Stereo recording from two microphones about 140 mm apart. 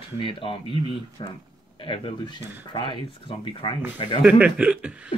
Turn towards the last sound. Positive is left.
turn(degrees=-10)  # may be behind; listen again after turning